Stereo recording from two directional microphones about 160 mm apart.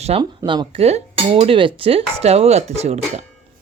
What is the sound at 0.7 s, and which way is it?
Speech, 40° right (ahead or behind).